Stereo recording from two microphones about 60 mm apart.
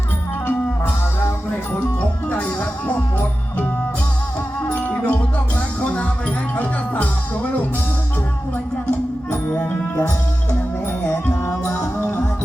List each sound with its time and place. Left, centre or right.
2.0 s music: left
4.7 s music: left
9.3 s music: left
11.1 s music: left